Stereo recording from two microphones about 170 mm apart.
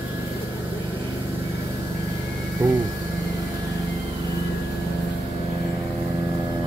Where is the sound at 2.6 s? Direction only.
10° right (ahead or behind).